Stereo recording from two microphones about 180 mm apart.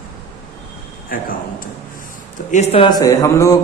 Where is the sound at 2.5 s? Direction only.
40° left (ahead or behind).